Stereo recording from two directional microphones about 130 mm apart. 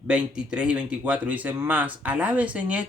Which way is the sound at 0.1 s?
10° right (ahead or behind).